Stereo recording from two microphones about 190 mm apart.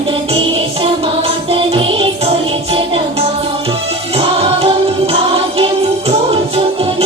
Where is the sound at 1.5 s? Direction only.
30° right (ahead or behind).